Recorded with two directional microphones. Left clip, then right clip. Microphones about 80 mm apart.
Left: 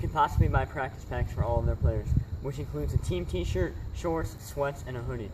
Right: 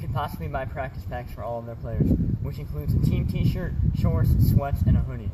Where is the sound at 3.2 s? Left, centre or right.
Left.